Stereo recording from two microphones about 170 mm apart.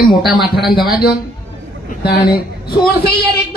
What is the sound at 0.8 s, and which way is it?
Speech, 60° left (ahead or behind).